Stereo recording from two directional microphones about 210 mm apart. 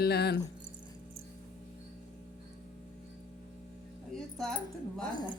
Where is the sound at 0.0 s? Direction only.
50° left (ahead or behind).